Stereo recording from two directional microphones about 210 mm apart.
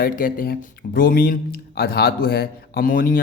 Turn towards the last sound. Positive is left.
turn(degrees=45)  # may be behind; listen again after turning